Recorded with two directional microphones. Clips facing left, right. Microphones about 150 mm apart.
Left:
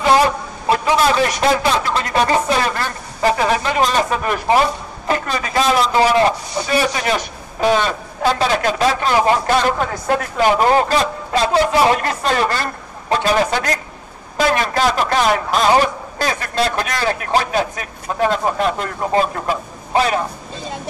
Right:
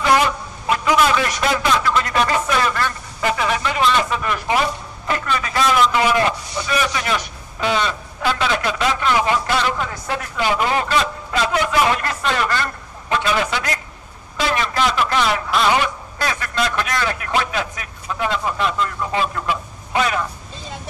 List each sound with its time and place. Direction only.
0.0 s a man's voice: 35° left (ahead or behind)